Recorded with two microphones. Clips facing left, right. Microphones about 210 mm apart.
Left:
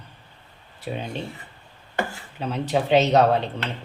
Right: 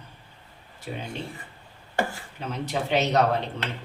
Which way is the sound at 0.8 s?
15° left (ahead or behind).